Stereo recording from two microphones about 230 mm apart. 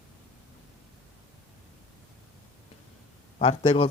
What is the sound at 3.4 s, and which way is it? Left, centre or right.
Speech, left.